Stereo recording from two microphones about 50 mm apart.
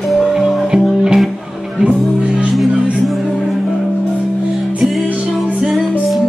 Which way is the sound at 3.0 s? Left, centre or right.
Centre.